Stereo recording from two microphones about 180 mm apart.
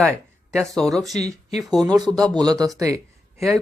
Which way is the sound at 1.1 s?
35° left (ahead or behind).